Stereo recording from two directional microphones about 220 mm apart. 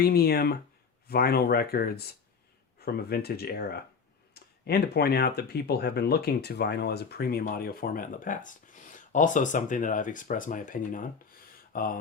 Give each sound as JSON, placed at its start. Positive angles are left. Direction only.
{"t": 0.0, "sound": "speech", "side_deg": 45}